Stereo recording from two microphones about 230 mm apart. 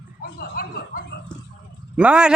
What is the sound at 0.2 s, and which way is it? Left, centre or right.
Speech, left.